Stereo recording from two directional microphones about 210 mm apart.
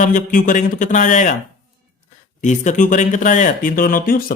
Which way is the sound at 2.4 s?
35° left (ahead or behind).